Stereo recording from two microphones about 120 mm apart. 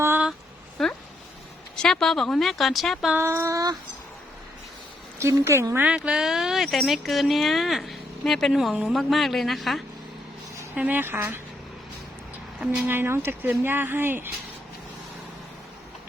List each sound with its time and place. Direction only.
0.8 s speech: centre (ahead or behind)
3.2 s a woman's voice: 25° right (ahead or behind)
5.2 s a woman's voice: 25° right (ahead or behind)
6.0 s speech: 5° right (ahead or behind)
10.8 s speech: 15° right (ahead or behind)
12.8 s speech: 20° right (ahead or behind)